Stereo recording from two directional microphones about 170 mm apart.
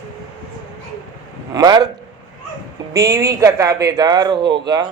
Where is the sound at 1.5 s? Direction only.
25° right (ahead or behind).